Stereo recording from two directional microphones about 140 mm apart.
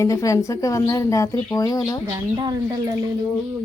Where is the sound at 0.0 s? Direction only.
20° left (ahead or behind).